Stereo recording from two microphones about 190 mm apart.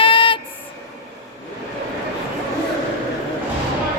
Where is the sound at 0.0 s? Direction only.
30° left (ahead or behind).